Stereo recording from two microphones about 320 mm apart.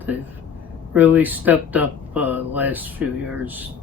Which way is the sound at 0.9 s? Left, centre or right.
Centre.